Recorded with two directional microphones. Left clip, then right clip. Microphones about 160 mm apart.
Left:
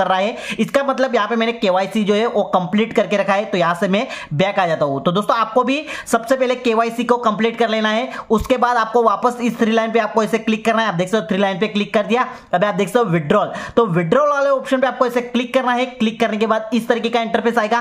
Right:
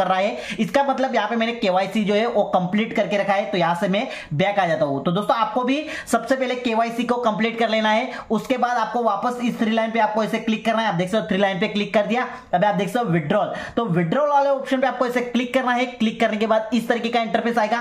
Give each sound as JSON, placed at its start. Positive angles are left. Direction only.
{"t": 0.0, "sound": "speech", "side_deg": 30}